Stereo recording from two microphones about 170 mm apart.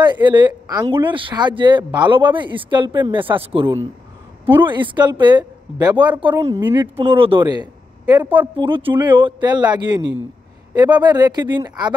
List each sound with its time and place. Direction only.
0.0 s speech: 25° right (ahead or behind)
4.6 s speech: 30° right (ahead or behind)
6.3 s speech: 15° right (ahead or behind)
7.0 s speech: 30° right (ahead or behind)
8.2 s speech: 10° right (ahead or behind)
8.5 s speech: 30° right (ahead or behind)